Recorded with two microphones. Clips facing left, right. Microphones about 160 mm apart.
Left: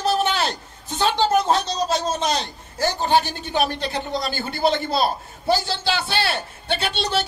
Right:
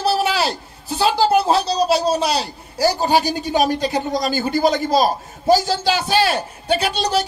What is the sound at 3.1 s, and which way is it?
Speech, 10° right (ahead or behind).